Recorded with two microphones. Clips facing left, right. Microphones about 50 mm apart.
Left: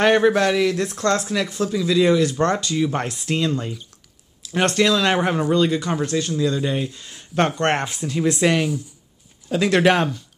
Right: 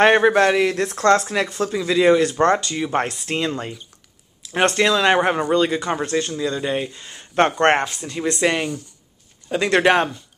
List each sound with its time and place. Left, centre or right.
0.0 s speech: right
6.3 s speech: centre
7.8 s speech: centre